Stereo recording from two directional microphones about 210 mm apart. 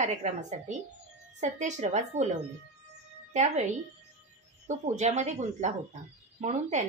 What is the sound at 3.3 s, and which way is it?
Speech, 35° right (ahead or behind).